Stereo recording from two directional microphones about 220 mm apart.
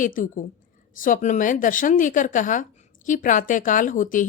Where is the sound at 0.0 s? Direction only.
35° left (ahead or behind).